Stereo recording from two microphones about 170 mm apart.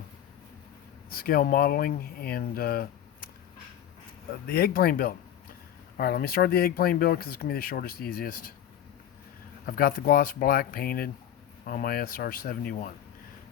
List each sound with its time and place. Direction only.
1.1 s speech: 60° left (ahead or behind)
4.4 s speech: 60° left (ahead or behind)
9.6 s speech: 60° left (ahead or behind)